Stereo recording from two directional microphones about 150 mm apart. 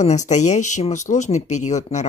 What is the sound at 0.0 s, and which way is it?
Speech, 55° left (ahead or behind).